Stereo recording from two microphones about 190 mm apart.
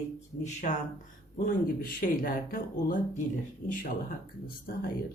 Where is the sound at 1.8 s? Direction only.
50° left (ahead or behind).